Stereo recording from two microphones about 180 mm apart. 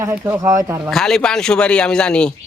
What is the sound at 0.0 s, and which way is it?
Speech, 15° right (ahead or behind).